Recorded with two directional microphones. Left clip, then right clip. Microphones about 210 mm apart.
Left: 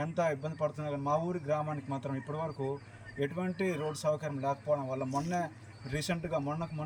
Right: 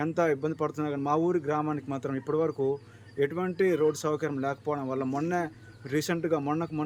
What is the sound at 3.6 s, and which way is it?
Speech, 15° right (ahead or behind).